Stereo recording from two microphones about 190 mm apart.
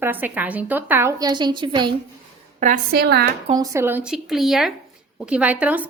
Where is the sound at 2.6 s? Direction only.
50° right (ahead or behind).